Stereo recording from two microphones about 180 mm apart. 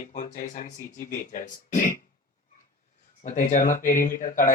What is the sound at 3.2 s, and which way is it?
Speech, 45° left (ahead or behind).